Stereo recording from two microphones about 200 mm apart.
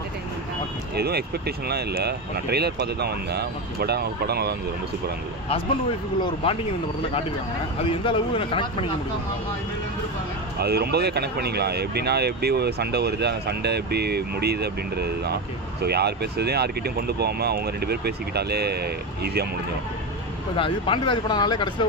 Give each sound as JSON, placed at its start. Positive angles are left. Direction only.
{"t": 0.9, "sound": "speech", "side_deg": -50}
{"t": 6.2, "sound": "speech", "side_deg": 30}
{"t": 8.0, "sound": "speech", "side_deg": 25}
{"t": 10.6, "sound": "speech", "side_deg": -55}
{"t": 20.5, "sound": "speech", "side_deg": 25}